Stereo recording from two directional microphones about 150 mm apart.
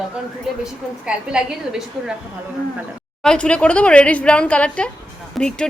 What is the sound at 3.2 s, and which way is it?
A woman's voice, 5° left (ahead or behind).